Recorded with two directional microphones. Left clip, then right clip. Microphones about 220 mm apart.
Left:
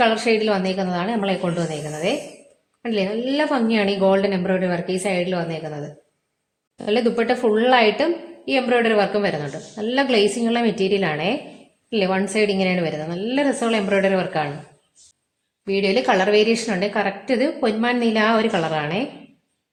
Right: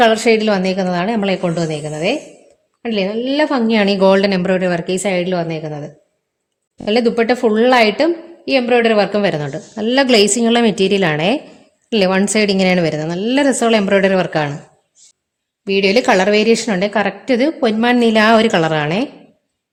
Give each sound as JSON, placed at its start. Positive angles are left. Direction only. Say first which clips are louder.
{"t": 0.0, "sound": "a woman's voice", "louder": "right 6 dB", "side_deg": -45}
{"t": 6.8, "sound": "a woman's voice", "louder": "right 5 dB", "side_deg": -45}
{"t": 15.6, "sound": "a woman's voice", "louder": "right 6 dB", "side_deg": -50}